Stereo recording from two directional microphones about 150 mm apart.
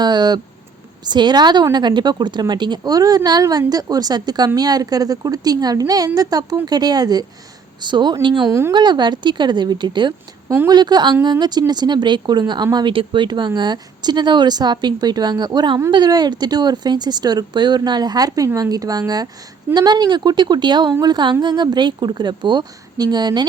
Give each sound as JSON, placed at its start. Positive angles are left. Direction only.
{"t": 0.0, "sound": "a woman's voice", "side_deg": -30}
{"t": 8.4, "sound": "a woman's voice", "side_deg": -15}
{"t": 8.7, "sound": "a woman's voice", "side_deg": -30}